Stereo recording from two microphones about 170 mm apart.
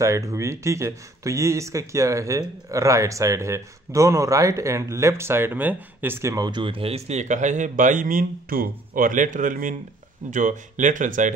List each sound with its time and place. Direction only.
0.0 s speech: 20° right (ahead or behind); by 11.3 s 50° right (ahead or behind)